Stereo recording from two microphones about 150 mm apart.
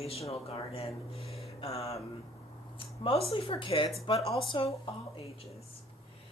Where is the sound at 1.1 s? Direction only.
40° left (ahead or behind).